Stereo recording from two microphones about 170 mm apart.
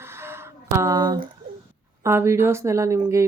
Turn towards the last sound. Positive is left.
turn(degrees=-20)  # may be behind; listen again after turning